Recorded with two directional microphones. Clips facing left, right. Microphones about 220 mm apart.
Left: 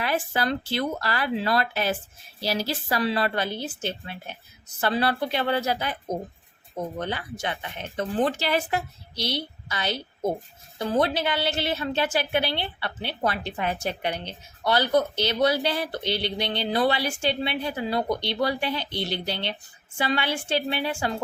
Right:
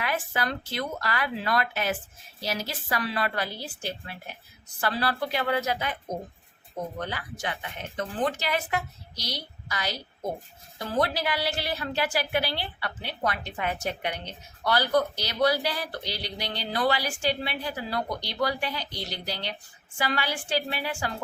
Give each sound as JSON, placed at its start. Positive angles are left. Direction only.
{"t": 0.0, "sound": "a woman's voice", "side_deg": 30}
{"t": 7.0, "sound": "a woman's voice", "side_deg": 25}